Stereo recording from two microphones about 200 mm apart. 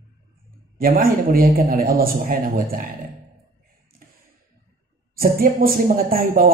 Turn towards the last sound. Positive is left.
turn(degrees=-45)  # may be behind; listen again after turning